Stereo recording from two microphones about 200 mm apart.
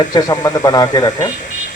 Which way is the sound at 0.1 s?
20° left (ahead or behind).